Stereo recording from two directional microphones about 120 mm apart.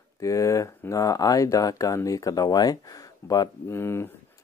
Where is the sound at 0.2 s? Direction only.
25° left (ahead or behind).